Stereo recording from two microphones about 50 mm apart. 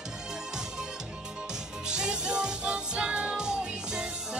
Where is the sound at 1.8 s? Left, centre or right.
Centre.